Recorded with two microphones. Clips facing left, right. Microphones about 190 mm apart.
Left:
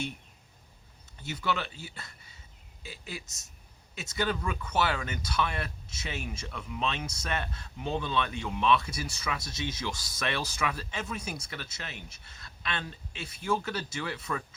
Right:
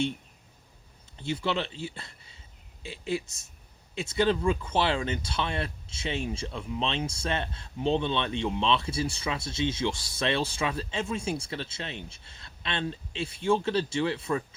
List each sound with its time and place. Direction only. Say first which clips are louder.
1.2 s speech: right 3 dB; 30° right (ahead or behind)